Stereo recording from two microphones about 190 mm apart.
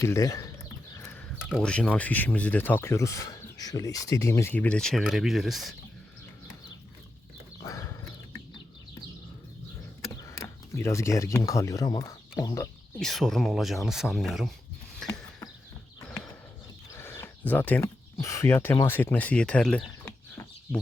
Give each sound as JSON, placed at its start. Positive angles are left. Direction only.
{"t": 0.0, "sound": "speech", "side_deg": 15}
{"t": 1.5, "sound": "speech", "side_deg": 0}
{"t": 7.6, "sound": "horse", "side_deg": 15}
{"t": 10.2, "sound": "speech", "side_deg": 15}
{"t": 13.0, "sound": "speech", "side_deg": 0}
{"t": 14.9, "sound": "a sound", "side_deg": 0}
{"t": 16.0, "sound": "horse", "side_deg": 15}
{"t": 16.9, "sound": "speech", "side_deg": 15}